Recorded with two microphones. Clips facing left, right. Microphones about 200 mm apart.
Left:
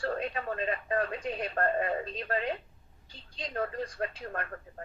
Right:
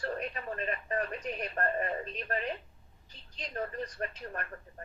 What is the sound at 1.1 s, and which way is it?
Speech, 30° left (ahead or behind).